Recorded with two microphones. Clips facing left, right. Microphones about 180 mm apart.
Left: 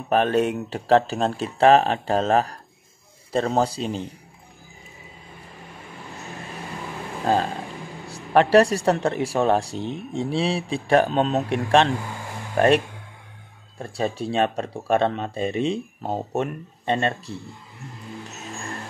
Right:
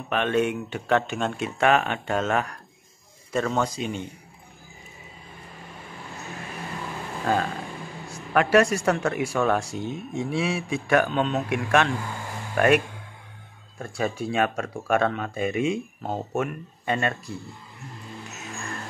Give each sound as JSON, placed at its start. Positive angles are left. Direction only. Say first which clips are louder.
{"t": 0.1, "sound": "speech", "louder": "left 3 dB", "side_deg": 40}
{"t": 7.2, "sound": "speech", "louder": "left 3 dB", "side_deg": 30}